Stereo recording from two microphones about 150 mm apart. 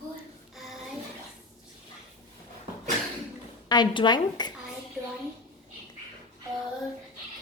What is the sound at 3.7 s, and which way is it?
Speech, 30° left (ahead or behind).